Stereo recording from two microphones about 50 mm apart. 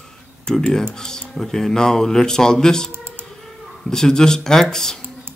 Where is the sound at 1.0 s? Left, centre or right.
Centre.